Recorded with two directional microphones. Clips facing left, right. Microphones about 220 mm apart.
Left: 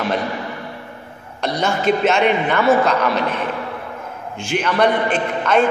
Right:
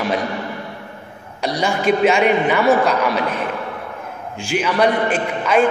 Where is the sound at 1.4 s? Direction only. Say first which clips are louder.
Even; 10° right (ahead or behind).